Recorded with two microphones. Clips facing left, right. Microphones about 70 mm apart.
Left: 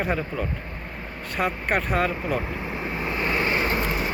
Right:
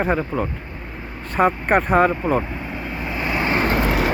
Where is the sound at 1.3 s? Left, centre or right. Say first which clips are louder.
Right 8 dB; right.